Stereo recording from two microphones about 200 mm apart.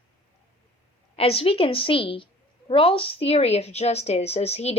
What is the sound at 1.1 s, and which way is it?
Speech, 30° left (ahead or behind).